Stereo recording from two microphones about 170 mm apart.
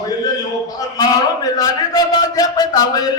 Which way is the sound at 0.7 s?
20° left (ahead or behind).